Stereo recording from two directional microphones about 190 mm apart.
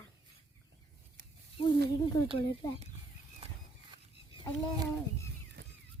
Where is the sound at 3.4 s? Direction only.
30° right (ahead or behind).